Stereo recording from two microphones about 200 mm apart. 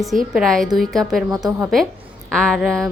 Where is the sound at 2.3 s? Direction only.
5° left (ahead or behind).